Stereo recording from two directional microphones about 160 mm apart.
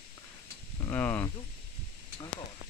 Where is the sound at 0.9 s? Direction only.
10° left (ahead or behind).